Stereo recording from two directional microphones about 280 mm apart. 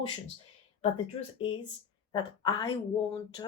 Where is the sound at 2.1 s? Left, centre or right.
Centre.